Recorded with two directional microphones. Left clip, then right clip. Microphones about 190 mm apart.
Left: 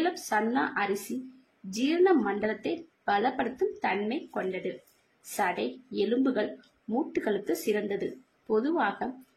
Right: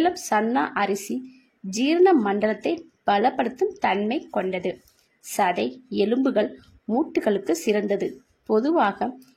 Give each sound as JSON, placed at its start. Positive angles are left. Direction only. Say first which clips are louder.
{"t": 0.0, "sound": "a woman's voice", "louder": "right 6 dB", "side_deg": -40}